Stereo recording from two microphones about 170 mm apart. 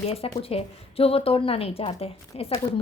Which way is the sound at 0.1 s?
35° left (ahead or behind).